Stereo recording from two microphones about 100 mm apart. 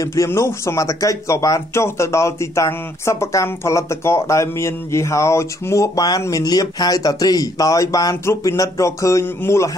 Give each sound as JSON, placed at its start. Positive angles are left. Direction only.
{"t": 0.0, "sound": "speech", "side_deg": 30}